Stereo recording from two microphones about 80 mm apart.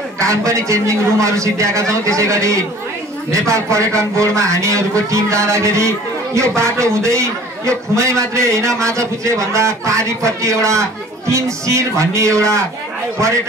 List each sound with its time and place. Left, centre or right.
0.2 s speech: right